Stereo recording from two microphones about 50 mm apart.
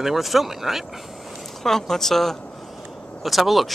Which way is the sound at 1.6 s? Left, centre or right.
Centre.